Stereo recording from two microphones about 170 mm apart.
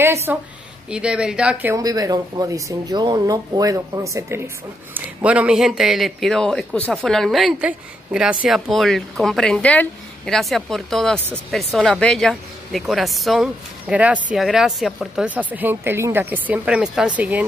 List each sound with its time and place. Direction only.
0.0 s a woman's voice: 15° right (ahead or behind)
1.8 s a woman's voice: 20° right (ahead or behind)